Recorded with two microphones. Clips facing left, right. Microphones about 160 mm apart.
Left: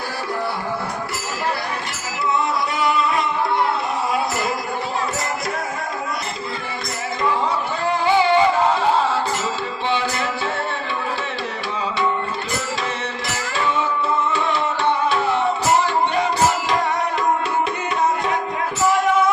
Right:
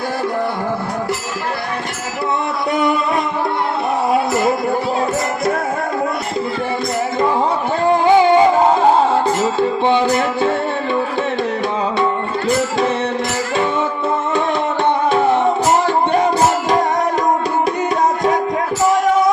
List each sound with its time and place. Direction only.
8.0 s music: 45° right (ahead or behind)